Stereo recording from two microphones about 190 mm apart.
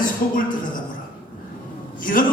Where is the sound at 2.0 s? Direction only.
45° left (ahead or behind).